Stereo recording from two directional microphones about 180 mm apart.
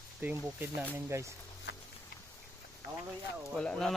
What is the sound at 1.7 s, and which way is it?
Music, 75° left (ahead or behind).